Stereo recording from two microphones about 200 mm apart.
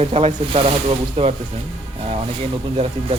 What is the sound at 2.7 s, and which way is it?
Speech, 30° right (ahead or behind).